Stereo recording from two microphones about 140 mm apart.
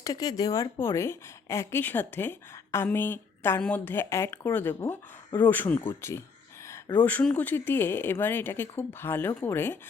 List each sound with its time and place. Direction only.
0.0 s a woman's voice: 25° left (ahead or behind)